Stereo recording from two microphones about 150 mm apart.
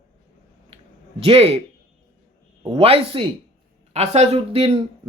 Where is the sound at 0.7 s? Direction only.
40° right (ahead or behind).